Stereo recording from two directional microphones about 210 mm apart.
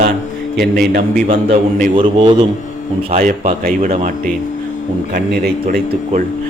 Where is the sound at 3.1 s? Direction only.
40° right (ahead or behind).